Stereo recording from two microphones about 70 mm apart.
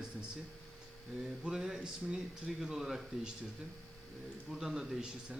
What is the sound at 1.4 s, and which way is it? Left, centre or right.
A man's voice, centre.